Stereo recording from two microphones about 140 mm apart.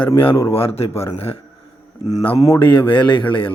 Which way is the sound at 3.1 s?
35° left (ahead or behind).